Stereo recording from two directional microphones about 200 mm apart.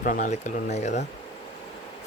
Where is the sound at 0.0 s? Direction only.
40° left (ahead or behind).